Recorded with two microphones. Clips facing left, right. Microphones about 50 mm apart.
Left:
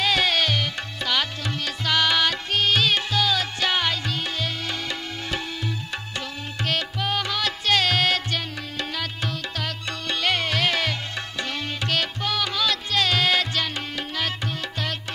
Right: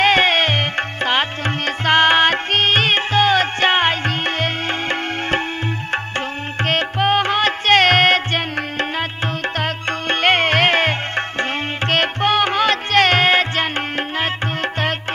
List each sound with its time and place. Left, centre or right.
0.0 s music: right